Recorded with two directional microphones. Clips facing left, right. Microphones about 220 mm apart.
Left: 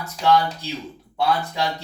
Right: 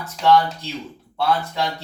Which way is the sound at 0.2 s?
15° left (ahead or behind).